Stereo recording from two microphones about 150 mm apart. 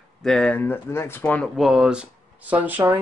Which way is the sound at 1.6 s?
5° right (ahead or behind).